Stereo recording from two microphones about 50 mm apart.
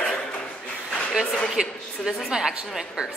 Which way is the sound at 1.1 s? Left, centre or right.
Centre.